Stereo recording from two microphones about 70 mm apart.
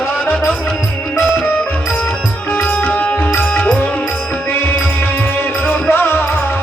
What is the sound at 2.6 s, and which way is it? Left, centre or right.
Music, left.